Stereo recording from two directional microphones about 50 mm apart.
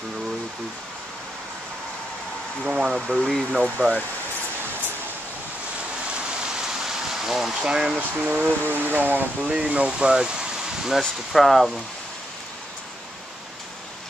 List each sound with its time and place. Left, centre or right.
2.6 s speech: centre
7.2 s a sound: centre
7.6 s speech: centre
8.4 s speech: right
9.5 s speech: right
10.9 s speech: centre